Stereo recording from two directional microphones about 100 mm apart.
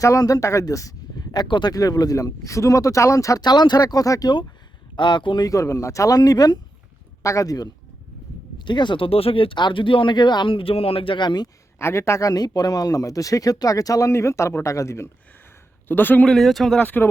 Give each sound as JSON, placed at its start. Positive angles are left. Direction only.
{"t": 0.0, "sound": "speech", "side_deg": 35}
{"t": 1.7, "sound": "speech", "side_deg": 35}
{"t": 4.9, "sound": "speech", "side_deg": 50}
{"t": 5.5, "sound": "speech", "side_deg": 35}
{"t": 8.5, "sound": "speech", "side_deg": 50}
{"t": 9.0, "sound": "speech", "side_deg": 70}
{"t": 11.8, "sound": "speech", "side_deg": 25}
{"t": 12.3, "sound": "speech", "side_deg": 40}
{"t": 16.3, "sound": "speech", "side_deg": 0}
{"t": 16.7, "sound": "speech", "side_deg": 20}